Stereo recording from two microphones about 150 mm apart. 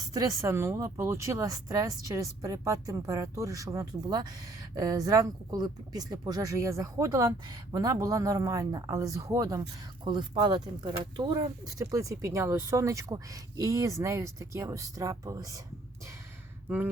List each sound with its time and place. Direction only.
0.1 s speech: 20° right (ahead or behind)
16.6 s speech: 10° right (ahead or behind)